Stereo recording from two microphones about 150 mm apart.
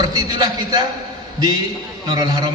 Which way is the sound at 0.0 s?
25° right (ahead or behind).